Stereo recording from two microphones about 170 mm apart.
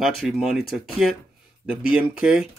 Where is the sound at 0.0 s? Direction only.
Centre (ahead or behind).